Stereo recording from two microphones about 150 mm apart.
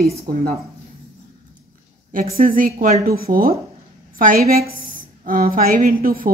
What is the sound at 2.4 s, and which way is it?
A woman's voice, 70° right (ahead or behind).